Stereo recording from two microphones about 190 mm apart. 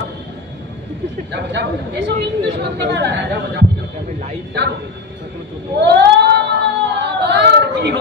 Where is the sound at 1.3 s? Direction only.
65° right (ahead or behind).